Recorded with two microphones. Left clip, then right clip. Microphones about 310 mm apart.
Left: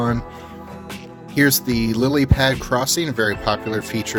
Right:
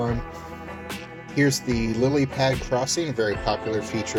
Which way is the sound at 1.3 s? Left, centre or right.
Left.